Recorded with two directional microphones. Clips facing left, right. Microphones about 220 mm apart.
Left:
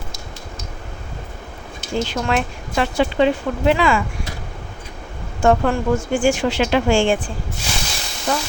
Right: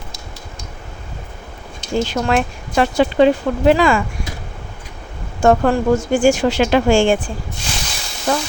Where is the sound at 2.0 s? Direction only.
45° right (ahead or behind).